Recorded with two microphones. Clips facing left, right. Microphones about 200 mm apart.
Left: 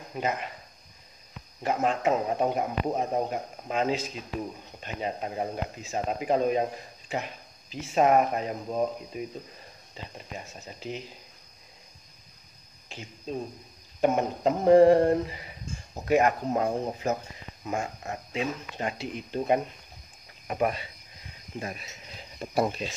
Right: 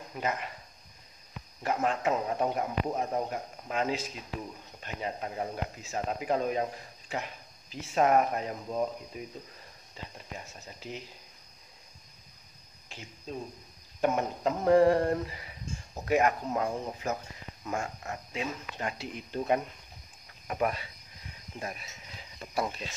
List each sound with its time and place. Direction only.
0.1 s speech: 20° left (ahead or behind)
1.6 s speech: 25° left (ahead or behind)
14.0 s speech: 25° left (ahead or behind)
17.6 s speech: 20° left (ahead or behind)
22.4 s speech: 30° left (ahead or behind)